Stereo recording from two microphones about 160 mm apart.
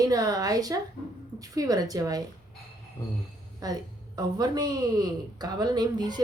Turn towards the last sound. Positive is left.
turn(degrees=-25)  # may be behind; listen again after turning